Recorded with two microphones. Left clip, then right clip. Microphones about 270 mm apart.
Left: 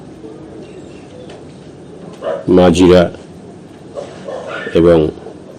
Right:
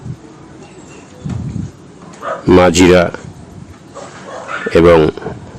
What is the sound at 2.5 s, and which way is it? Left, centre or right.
Speech, right.